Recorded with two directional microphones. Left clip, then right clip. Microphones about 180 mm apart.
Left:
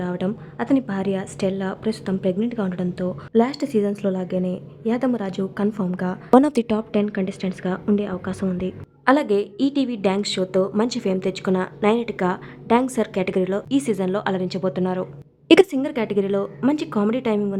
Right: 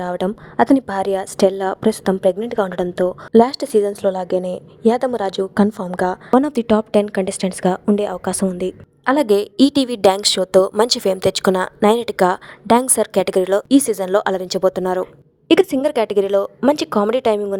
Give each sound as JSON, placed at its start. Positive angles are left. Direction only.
{"t": 0.0, "sound": "a woman's voice", "side_deg": -40}
{"t": 6.3, "sound": "speech", "side_deg": 0}
{"t": 6.9, "sound": "a woman's voice", "side_deg": -50}
{"t": 13.7, "sound": "a woman's voice", "side_deg": -30}
{"t": 15.4, "sound": "a woman's voice", "side_deg": 0}
{"t": 15.7, "sound": "a woman's voice", "side_deg": -45}